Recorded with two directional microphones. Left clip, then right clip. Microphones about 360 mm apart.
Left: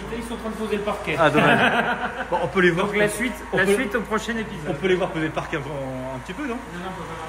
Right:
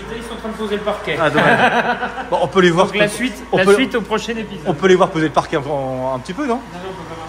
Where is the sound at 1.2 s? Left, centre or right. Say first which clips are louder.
Right 4 dB; centre.